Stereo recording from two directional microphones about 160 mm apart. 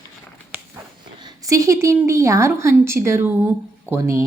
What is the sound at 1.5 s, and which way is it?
Speech, 20° right (ahead or behind).